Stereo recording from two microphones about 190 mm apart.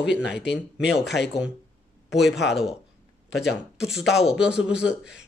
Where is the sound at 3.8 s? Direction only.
Centre (ahead or behind).